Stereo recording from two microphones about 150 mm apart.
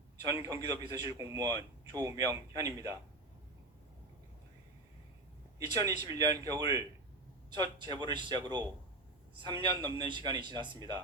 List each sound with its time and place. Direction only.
0.3 s a man's voice: 20° right (ahead or behind)
5.5 s a man's voice: 25° right (ahead or behind)